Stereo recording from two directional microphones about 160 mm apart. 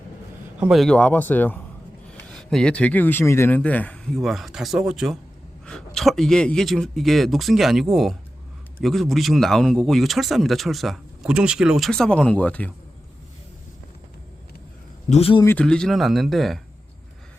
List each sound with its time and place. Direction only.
0.6 s speech: centre (ahead or behind)
15.1 s speech: 35° left (ahead or behind)
15.4 s speech: 5° left (ahead or behind)